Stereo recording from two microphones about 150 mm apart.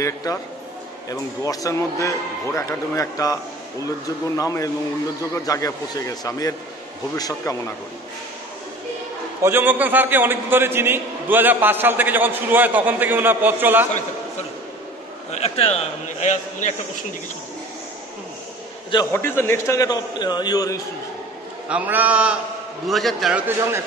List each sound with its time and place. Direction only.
0.0 s a man's voice: 20° left (ahead or behind)
1.4 s a man's voice: 25° left (ahead or behind)
4.4 s a man's voice: 20° left (ahead or behind)
9.4 s a man's voice: 15° right (ahead or behind)
15.3 s a man's voice: 45° left (ahead or behind)
19.1 s a man's voice: 15° left (ahead or behind)
21.6 s a man's voice: 10° right (ahead or behind)